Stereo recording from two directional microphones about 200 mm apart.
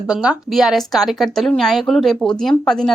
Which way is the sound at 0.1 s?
5° right (ahead or behind).